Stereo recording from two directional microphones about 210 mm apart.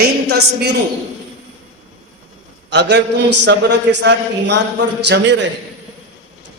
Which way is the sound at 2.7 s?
55° right (ahead or behind).